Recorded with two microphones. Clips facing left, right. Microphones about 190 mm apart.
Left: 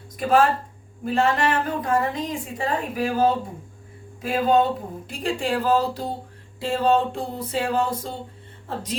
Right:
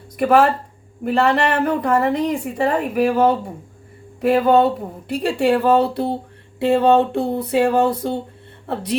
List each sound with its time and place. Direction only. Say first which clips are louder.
0.2 s a woman's voice: right 4 dB; 65° right (ahead or behind)